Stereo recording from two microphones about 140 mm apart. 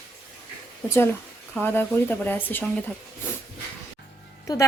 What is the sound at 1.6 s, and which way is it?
A woman's voice, 15° left (ahead or behind).